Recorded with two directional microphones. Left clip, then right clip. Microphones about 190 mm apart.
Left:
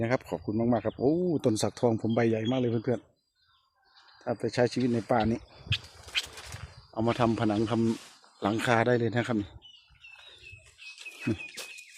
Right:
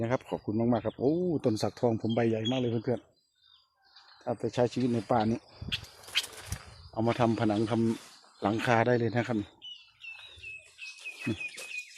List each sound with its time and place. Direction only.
0.0 s speech: 10° left (ahead or behind)
4.3 s speech: 15° left (ahead or behind)